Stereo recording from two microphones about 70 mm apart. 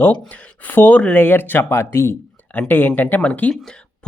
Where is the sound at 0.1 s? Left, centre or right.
Left.